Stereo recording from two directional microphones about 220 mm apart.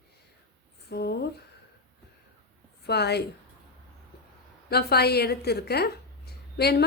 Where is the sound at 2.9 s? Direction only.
50° left (ahead or behind).